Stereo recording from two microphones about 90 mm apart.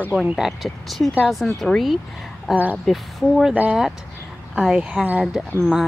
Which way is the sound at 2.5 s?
20° right (ahead or behind).